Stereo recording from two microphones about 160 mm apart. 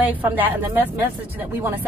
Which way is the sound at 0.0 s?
10° right (ahead or behind).